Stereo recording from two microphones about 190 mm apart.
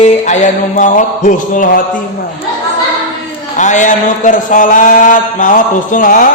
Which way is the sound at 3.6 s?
40° left (ahead or behind).